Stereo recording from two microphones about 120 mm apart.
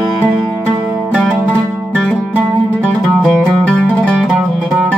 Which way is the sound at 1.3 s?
15° right (ahead or behind).